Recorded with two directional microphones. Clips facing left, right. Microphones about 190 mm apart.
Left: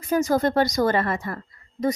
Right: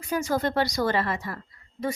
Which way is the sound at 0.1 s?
45° left (ahead or behind).